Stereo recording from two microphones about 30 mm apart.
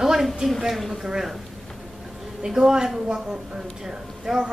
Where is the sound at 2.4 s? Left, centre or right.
Centre.